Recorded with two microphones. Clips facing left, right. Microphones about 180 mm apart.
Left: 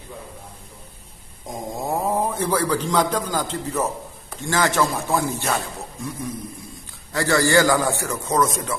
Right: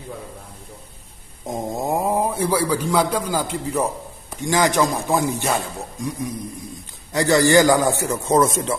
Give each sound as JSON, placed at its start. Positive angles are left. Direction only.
{"t": 1.5, "sound": "a man's voice", "side_deg": -20}